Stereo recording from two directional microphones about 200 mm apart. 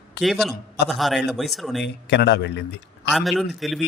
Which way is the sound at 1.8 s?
60° left (ahead or behind).